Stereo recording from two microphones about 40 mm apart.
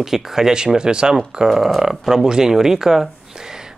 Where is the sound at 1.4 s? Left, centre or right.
Centre.